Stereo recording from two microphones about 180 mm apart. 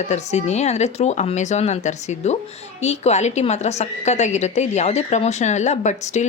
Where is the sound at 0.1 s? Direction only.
40° left (ahead or behind).